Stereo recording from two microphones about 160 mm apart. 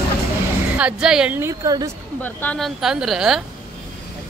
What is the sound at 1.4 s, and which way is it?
Speech, 20° right (ahead or behind).